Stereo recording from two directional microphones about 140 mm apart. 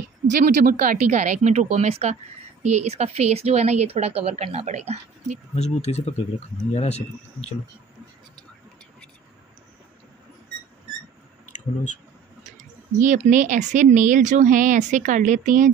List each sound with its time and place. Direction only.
0.3 s speech: 65° right (ahead or behind)
5.6 s speech: 50° left (ahead or behind)
12.4 s speech: 60° right (ahead or behind)